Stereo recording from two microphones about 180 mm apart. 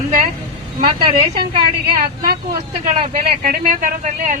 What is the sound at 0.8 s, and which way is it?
Speech, 25° right (ahead or behind).